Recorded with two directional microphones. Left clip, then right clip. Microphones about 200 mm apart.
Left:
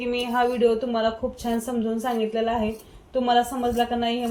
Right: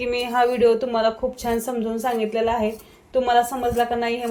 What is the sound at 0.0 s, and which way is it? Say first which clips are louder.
A woman's voice: right 3 dB; 60° right (ahead or behind).